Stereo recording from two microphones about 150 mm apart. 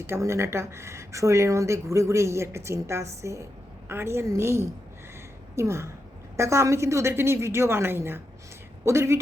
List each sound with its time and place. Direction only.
0.1 s a woman's voice: 20° right (ahead or behind)